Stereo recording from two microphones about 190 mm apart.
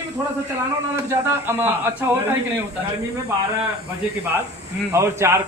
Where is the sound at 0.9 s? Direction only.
10° right (ahead or behind).